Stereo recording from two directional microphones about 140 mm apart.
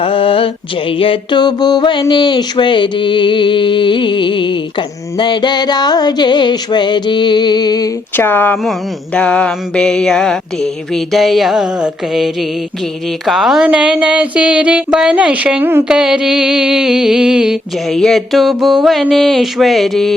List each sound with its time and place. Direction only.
0.0 s mantra: 40° left (ahead or behind)
8.1 s speech: 15° left (ahead or behind)
9.1 s a sound: 10° left (ahead or behind)